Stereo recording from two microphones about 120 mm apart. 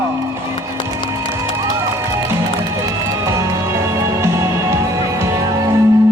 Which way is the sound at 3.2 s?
25° right (ahead or behind).